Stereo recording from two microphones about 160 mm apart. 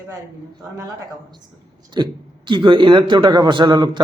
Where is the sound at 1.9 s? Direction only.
30° right (ahead or behind).